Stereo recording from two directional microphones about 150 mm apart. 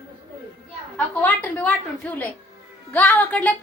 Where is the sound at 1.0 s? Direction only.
10° left (ahead or behind).